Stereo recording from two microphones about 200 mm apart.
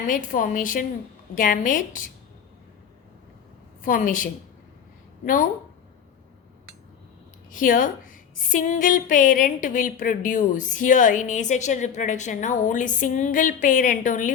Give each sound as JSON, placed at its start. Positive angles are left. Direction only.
{"t": 0.1, "sound": "a woman's voice", "side_deg": 40}
{"t": 3.8, "sound": "a woman's voice", "side_deg": 45}
{"t": 7.5, "sound": "a woman's voice", "side_deg": 40}